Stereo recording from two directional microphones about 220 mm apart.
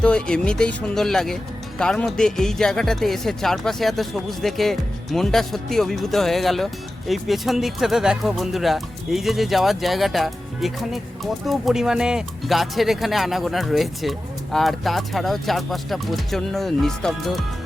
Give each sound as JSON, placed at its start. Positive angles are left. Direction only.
{"t": 0.0, "sound": "speech", "side_deg": 5}